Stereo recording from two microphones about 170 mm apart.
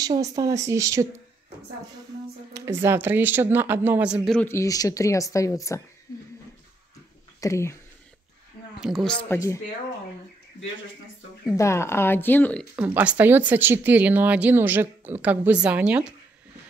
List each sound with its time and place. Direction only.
0.0 s speech: 20° right (ahead or behind)
2.5 s speech: 15° right (ahead or behind)
4.4 s speech: 15° left (ahead or behind)
7.3 s speech: 20° left (ahead or behind)
8.7 s speech: centre (ahead or behind)
9.3 s speech: 15° left (ahead or behind)
11.5 s speech: 15° left (ahead or behind)
12.7 s speech: 10° right (ahead or behind)